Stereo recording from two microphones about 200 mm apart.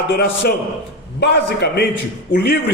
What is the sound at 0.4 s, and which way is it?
A man's voice, 50° left (ahead or behind).